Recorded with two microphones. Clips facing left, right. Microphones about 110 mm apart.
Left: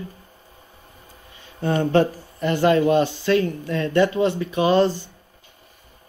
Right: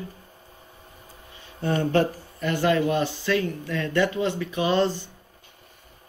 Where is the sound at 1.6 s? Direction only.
15° left (ahead or behind); by 4.8 s 40° left (ahead or behind).